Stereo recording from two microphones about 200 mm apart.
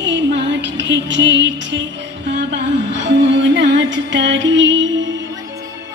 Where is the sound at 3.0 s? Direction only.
65° right (ahead or behind).